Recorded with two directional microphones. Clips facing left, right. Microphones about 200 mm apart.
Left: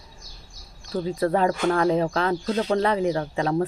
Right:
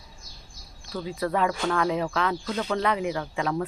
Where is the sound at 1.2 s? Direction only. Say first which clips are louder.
Left 4 dB; 35° left (ahead or behind).